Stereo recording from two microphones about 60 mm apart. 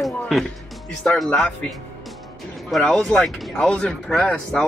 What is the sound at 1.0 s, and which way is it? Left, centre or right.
Speech, centre.